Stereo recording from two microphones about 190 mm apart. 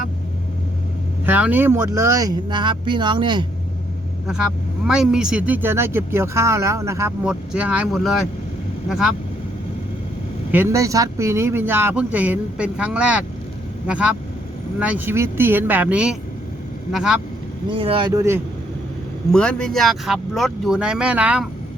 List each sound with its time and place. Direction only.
1.2 s speech: 10° right (ahead or behind); by 3.4 s 25° right (ahead or behind)
4.9 s speech: 5° right (ahead or behind)
10.5 s speech: 15° right (ahead or behind)
17.7 s speech: 25° right (ahead or behind)
19.3 s speech: 5° left (ahead or behind)